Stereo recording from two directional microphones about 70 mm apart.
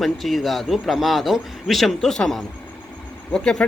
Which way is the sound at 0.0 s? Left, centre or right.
Centre.